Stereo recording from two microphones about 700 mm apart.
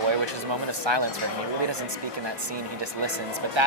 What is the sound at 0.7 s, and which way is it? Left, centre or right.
Speech, right.